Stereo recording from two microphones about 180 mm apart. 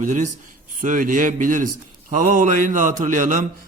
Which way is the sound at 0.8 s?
45° right (ahead or behind).